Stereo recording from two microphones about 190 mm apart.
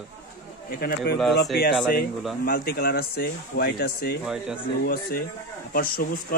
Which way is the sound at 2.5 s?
55° left (ahead or behind).